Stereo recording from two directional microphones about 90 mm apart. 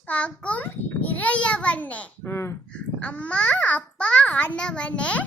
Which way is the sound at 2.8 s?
15° left (ahead or behind).